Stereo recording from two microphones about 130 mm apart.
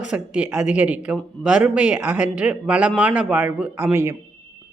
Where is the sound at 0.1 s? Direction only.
10° right (ahead or behind).